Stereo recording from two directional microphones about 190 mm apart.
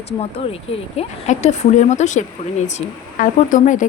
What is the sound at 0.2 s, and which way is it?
Speech, 30° left (ahead or behind).